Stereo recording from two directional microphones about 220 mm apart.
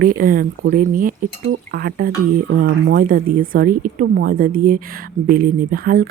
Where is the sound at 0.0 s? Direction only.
40° right (ahead or behind).